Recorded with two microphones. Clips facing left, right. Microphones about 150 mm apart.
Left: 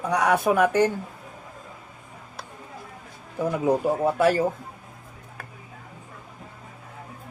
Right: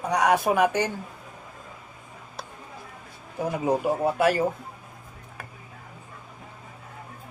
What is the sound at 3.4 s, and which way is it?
Speech, 55° left (ahead or behind).